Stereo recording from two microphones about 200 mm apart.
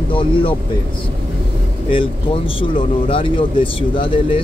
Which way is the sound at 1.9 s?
25° left (ahead or behind).